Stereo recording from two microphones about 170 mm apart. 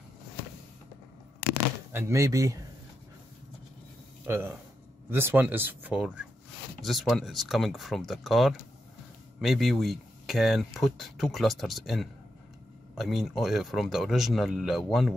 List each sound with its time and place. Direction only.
1.9 s speech: 15° right (ahead or behind)
4.3 s speech: 15° right (ahead or behind)